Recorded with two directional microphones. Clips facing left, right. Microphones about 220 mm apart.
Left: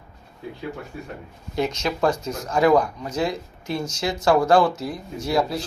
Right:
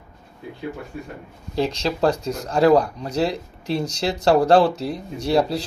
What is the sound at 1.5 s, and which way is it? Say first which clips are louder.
Speech: right 2 dB; 30° right (ahead or behind).